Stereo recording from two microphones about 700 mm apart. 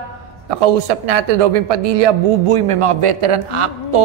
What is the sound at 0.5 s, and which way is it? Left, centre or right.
A man's voice, right.